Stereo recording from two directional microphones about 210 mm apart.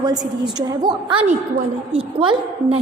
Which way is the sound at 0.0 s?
20° right (ahead or behind).